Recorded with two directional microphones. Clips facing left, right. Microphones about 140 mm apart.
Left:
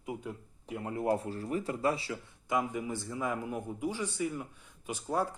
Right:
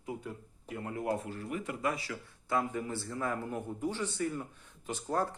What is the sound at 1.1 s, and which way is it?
Speech, 35° left (ahead or behind).